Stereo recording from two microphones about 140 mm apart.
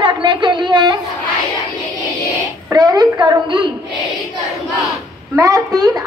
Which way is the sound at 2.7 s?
30° right (ahead or behind).